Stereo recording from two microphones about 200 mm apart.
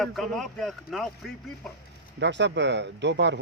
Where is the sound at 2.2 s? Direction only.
60° right (ahead or behind).